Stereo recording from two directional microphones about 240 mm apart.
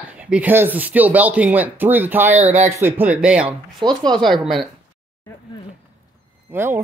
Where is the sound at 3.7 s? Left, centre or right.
Centre.